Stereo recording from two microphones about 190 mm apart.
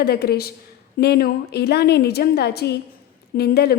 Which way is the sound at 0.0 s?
55° left (ahead or behind).